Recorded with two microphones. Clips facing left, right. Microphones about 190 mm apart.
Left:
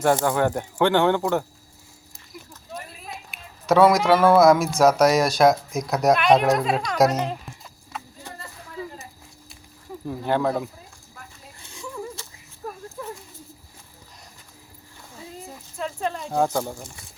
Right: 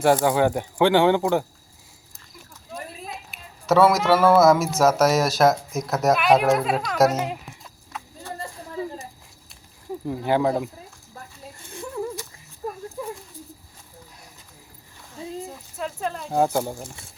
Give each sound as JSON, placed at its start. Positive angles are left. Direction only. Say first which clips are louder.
{"t": 0.0, "sound": "speech", "louder": "right 2 dB", "side_deg": -10}
{"t": 3.3, "sound": "speech", "louder": "even", "side_deg": 0}
{"t": 7.5, "sound": "horse", "louder": "left 1 dB", "side_deg": 0}
{"t": 8.3, "sound": "a sound", "louder": "right 5 dB", "side_deg": 15}
{"t": 10.1, "sound": "speech", "louder": "right 2 dB", "side_deg": -10}
{"t": 15.8, "sound": "a sound", "louder": "left 1 dB", "side_deg": 0}
{"t": 16.4, "sound": "speech", "louder": "right 1 dB", "side_deg": -10}